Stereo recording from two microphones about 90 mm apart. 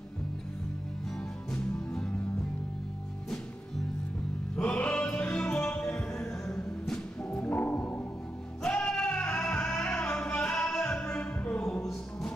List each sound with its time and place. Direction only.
1.5 s music: 10° left (ahead or behind)
4.6 s music: 10° left (ahead or behind)
8.6 s music: 10° left (ahead or behind)